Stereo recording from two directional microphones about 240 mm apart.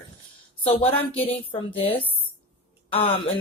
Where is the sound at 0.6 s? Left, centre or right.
Left.